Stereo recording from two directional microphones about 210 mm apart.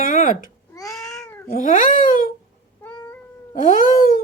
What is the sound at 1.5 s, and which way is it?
Speech, 40° left (ahead or behind).